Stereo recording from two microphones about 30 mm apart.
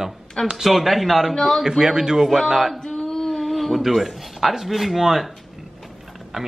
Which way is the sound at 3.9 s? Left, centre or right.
Centre.